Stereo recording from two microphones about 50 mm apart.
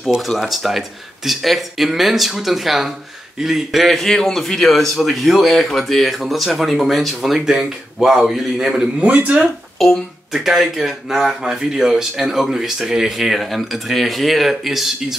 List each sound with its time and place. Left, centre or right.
0.4 s speech: centre
9.0 s speech: right
9.8 s speech: centre